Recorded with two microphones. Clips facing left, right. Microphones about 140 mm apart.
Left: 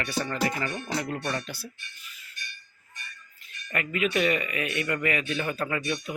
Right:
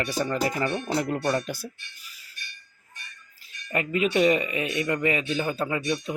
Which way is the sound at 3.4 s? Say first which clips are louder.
Right 4 dB; 30° right (ahead or behind).